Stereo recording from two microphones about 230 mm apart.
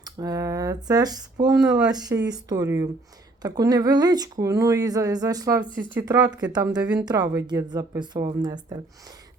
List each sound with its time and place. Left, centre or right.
0.0 s speech: centre
1.5 s speech: centre
1.9 s speech: centre